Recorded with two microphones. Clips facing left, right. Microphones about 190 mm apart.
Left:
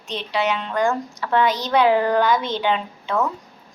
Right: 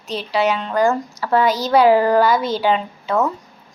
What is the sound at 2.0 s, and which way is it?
Speech, 5° right (ahead or behind).